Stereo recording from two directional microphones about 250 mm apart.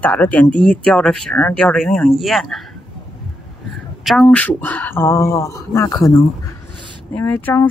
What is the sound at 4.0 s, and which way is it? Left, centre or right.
Speech, centre.